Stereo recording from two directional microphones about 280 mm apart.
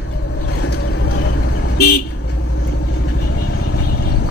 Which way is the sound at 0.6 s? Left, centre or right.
Left.